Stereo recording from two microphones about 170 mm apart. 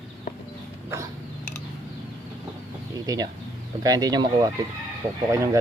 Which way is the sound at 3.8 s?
20° right (ahead or behind).